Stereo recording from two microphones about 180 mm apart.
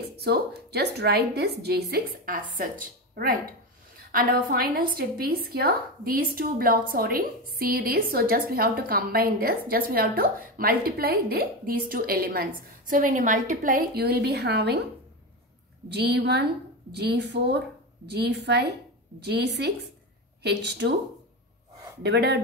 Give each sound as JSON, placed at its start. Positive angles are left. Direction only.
{"t": 0.0, "sound": "a woman's voice", "side_deg": -65}
{"t": 4.1, "sound": "a woman's voice", "side_deg": -55}
{"t": 15.9, "sound": "a woman's voice", "side_deg": -65}
{"t": 22.0, "sound": "a woman's voice", "side_deg": -65}